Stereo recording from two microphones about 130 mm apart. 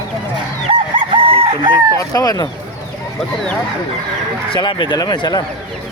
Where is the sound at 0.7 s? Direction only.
45° right (ahead or behind).